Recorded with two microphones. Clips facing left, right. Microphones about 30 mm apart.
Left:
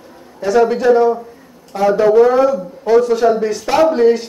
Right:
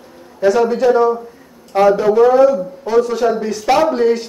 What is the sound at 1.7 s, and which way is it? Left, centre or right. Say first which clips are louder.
Speech: right 4 dB; right.